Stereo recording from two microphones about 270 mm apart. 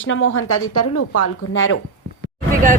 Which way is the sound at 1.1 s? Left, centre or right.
Left.